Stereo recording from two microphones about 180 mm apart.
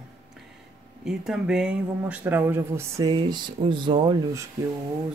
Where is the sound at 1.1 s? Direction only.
5° right (ahead or behind); by 4.4 s 25° right (ahead or behind).